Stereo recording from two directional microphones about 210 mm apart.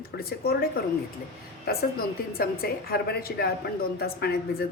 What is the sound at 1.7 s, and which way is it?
A woman's voice, 45° left (ahead or behind).